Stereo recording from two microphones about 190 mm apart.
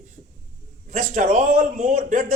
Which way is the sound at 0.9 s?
45° right (ahead or behind).